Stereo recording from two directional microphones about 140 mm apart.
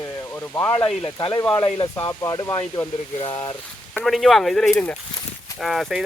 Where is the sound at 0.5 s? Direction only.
15° left (ahead or behind).